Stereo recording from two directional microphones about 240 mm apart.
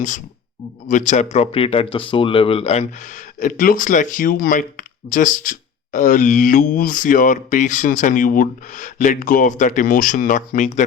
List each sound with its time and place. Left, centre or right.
0.9 s speech: left